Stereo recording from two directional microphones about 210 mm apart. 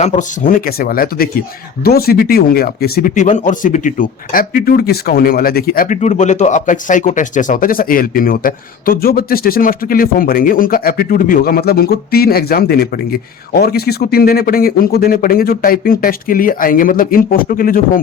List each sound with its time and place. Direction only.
0.0 s speech: 35° left (ahead or behind)